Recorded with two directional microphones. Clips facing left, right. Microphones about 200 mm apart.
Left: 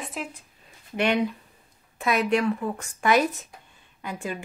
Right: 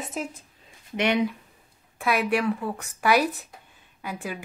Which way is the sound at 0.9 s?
10° right (ahead or behind).